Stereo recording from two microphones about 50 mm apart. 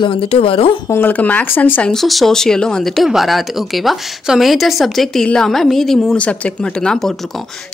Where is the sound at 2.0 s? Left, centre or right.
Centre.